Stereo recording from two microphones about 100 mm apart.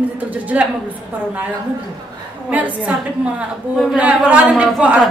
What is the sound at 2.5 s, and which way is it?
A woman's voice, 15° right (ahead or behind).